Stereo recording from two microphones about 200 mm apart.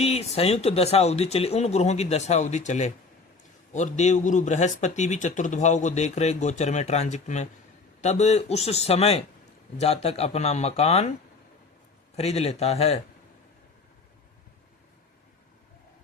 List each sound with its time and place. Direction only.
0.0 s speech: 30° left (ahead or behind)
12.1 s speech: 30° left (ahead or behind)